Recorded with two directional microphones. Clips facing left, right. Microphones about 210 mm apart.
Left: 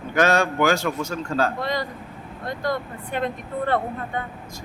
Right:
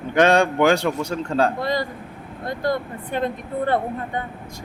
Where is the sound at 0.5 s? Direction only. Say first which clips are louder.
Right 3 dB; 30° right (ahead or behind).